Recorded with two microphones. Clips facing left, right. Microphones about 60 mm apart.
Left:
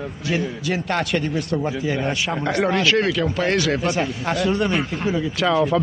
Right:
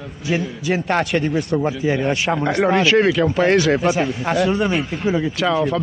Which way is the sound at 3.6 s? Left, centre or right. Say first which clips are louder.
Right 4 dB; centre.